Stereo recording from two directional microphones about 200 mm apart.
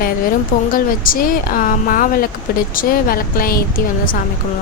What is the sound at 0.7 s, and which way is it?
Speech, 45° left (ahead or behind).